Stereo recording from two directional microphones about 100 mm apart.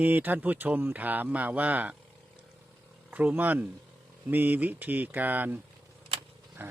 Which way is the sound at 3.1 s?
20° right (ahead or behind).